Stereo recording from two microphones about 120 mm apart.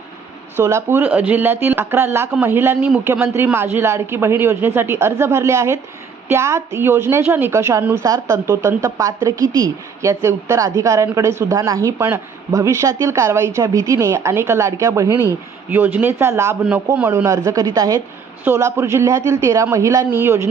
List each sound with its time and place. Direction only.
0.5 s a woman's voice: 20° right (ahead or behind)
17.2 s a woman's voice: 25° right (ahead or behind)